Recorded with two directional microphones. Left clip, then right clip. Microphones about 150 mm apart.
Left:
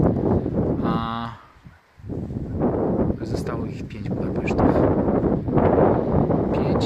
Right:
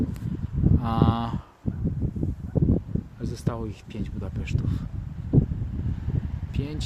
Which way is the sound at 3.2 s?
Centre (ahead or behind).